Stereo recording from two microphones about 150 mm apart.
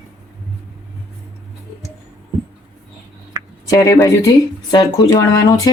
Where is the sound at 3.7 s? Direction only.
20° left (ahead or behind).